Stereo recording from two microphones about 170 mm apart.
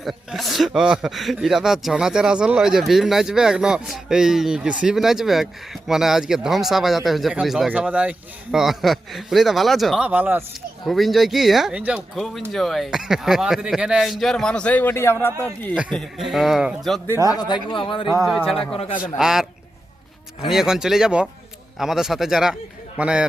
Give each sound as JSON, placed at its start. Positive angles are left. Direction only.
{"t": 0.0, "sound": "speech", "side_deg": 0}
{"t": 10.8, "sound": "speech", "side_deg": 0}
{"t": 15.7, "sound": "speech", "side_deg": 0}
{"t": 17.2, "sound": "speech", "side_deg": 25}
{"t": 18.2, "sound": "speech", "side_deg": 0}
{"t": 20.5, "sound": "speech", "side_deg": -5}